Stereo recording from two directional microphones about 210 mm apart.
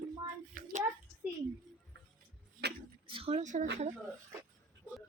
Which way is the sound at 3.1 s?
25° right (ahead or behind).